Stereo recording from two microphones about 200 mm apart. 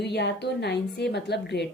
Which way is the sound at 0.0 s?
55° left (ahead or behind).